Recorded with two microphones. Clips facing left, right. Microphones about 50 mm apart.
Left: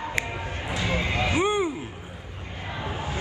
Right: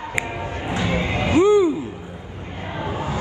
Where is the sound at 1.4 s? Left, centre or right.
Left.